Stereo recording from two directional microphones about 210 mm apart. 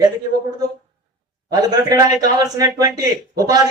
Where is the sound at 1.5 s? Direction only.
20° right (ahead or behind).